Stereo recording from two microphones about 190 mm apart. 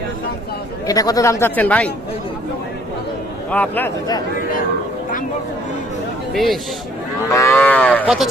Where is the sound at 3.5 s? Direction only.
5° left (ahead or behind).